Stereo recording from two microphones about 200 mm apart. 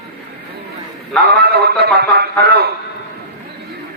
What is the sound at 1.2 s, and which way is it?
A man's voice, 50° right (ahead or behind).